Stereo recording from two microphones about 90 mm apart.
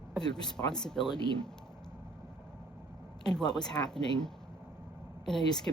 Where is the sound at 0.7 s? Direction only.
5° left (ahead or behind).